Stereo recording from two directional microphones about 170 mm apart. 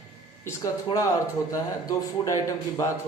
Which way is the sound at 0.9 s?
20° left (ahead or behind).